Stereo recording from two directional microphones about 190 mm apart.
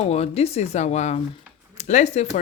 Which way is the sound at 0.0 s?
35° left (ahead or behind).